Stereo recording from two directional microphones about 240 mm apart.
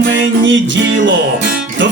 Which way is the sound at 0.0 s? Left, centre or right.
Right.